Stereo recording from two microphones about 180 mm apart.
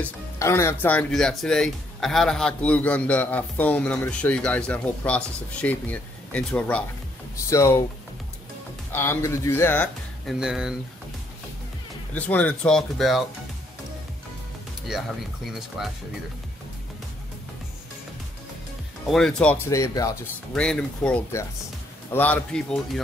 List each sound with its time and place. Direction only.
0.0 s speech: 15° left (ahead or behind)
8.9 s speech: 15° left (ahead or behind)
10.2 s speech: 5° right (ahead or behind)
12.1 s speech: 10° left (ahead or behind)
14.9 s speech: centre (ahead or behind)
19.0 s speech: centre (ahead or behind); by 20.1 s 20° left (ahead or behind)
20.5 s speech: 5° left (ahead or behind)